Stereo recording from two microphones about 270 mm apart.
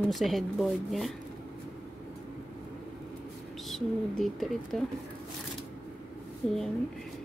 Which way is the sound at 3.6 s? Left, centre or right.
Centre.